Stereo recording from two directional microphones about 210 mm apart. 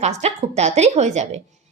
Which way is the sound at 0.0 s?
30° right (ahead or behind).